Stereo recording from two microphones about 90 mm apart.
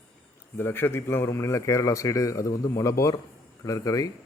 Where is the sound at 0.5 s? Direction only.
25° left (ahead or behind).